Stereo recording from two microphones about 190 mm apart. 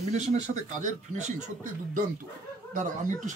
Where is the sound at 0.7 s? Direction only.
40° right (ahead or behind).